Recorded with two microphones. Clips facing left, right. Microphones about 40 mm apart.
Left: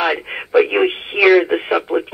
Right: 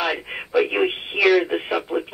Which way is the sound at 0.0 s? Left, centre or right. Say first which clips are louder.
Left 5 dB; left.